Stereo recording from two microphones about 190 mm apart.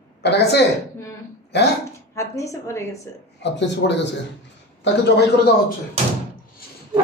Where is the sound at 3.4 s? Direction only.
70° left (ahead or behind).